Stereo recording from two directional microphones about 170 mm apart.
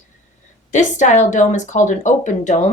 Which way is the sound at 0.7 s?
45° left (ahead or behind).